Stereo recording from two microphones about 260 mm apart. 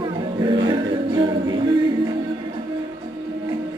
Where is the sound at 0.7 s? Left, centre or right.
Centre.